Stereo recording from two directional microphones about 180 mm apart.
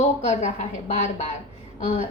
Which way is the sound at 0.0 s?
40° left (ahead or behind).